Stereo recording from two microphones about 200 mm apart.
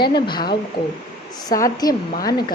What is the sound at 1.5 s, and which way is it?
Speech, 20° left (ahead or behind).